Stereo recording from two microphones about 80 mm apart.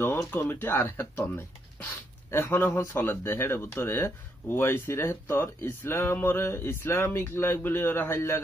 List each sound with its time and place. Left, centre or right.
0.0 s speech: left